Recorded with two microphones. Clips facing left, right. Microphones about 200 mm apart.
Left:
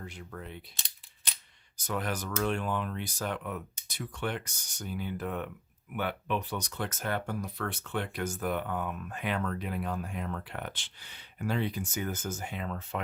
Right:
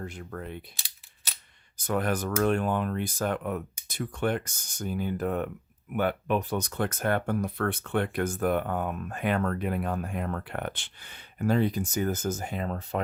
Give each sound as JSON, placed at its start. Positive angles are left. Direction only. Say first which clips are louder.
{"t": 0.0, "sound": "speech", "louder": "right 5 dB", "side_deg": -50}
{"t": 1.8, "sound": "speech", "louder": "right 6 dB", "side_deg": -50}